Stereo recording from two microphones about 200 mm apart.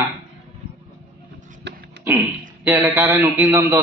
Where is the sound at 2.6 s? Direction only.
10° right (ahead or behind).